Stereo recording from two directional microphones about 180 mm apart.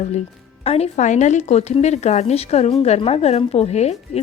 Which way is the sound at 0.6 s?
35° left (ahead or behind).